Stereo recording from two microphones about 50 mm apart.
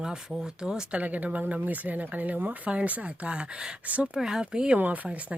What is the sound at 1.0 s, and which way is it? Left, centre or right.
Speech, right.